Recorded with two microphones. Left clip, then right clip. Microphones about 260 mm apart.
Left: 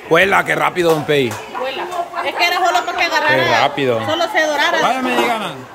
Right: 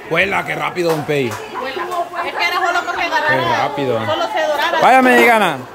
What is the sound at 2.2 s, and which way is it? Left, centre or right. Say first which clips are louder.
Chatter: left 3 dB; left.